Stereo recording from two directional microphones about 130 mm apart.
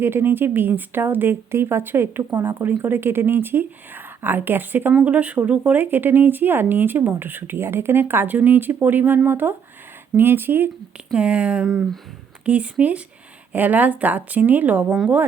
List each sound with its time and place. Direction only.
0.0 s speech: 15° right (ahead or behind)